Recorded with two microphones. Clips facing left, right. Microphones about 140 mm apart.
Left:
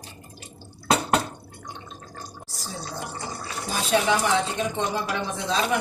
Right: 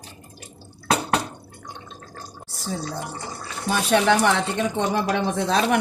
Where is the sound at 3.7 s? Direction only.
65° right (ahead or behind).